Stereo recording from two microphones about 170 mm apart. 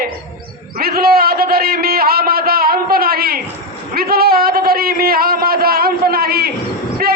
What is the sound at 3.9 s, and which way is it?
A man's voice, 65° right (ahead or behind).